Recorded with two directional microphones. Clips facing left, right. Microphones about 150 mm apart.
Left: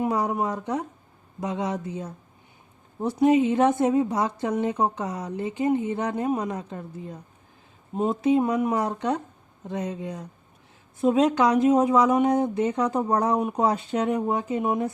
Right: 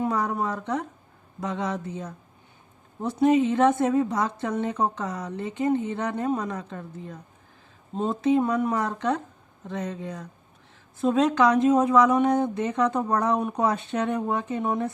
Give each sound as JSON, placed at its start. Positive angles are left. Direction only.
{"t": 0.0, "sound": "a woman's voice", "side_deg": 20}